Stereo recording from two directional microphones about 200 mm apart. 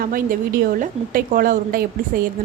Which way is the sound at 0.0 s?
45° right (ahead or behind).